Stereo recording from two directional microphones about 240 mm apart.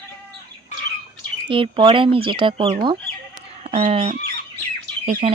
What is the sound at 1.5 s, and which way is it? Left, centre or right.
Speech, right.